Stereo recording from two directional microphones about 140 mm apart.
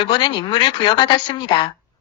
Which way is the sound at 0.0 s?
35° left (ahead or behind).